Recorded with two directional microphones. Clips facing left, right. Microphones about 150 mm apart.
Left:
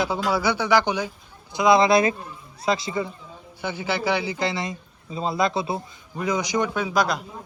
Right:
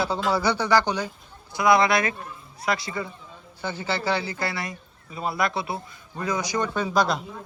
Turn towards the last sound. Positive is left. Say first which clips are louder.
# even
turn(degrees=0)  # may be behind; listen again after turning